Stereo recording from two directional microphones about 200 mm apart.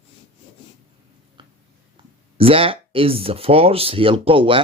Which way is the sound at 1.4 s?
25° right (ahead or behind).